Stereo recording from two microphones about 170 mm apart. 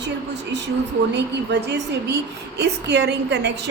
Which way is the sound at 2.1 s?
85° right.